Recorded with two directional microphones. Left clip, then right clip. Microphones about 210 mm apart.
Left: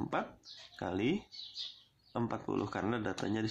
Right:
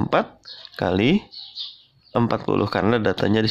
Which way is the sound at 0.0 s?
45° right (ahead or behind).